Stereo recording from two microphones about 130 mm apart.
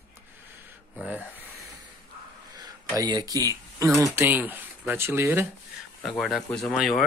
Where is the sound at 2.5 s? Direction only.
30° right (ahead or behind).